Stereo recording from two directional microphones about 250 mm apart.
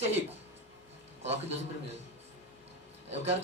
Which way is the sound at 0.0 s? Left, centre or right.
Right.